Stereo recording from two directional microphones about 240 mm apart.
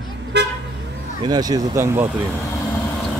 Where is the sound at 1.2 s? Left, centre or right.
Centre.